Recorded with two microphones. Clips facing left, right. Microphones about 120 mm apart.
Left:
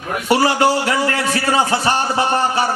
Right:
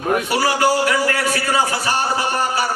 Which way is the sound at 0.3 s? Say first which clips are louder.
Left 7 dB; 25° left (ahead or behind).